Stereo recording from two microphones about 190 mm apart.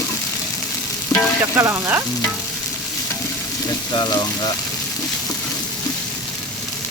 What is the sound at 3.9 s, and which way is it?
Speech, 20° left (ahead or behind).